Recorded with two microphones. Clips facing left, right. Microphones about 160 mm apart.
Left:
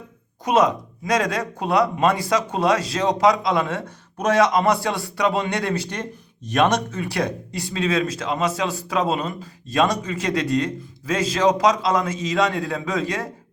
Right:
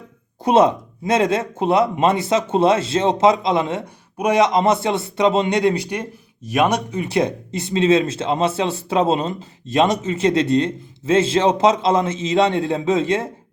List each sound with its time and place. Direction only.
0.4 s speech: 30° right (ahead or behind)